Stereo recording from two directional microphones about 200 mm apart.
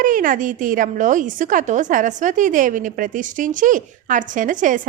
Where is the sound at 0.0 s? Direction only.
40° right (ahead or behind).